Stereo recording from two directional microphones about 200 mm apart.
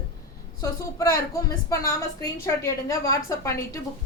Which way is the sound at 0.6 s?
15° left (ahead or behind).